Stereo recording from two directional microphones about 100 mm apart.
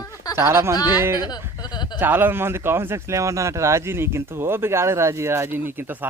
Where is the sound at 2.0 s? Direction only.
20° right (ahead or behind).